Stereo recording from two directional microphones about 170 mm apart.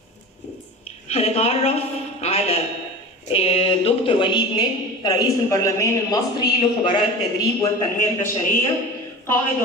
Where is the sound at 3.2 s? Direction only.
35° left (ahead or behind); by 6.5 s 20° left (ahead or behind).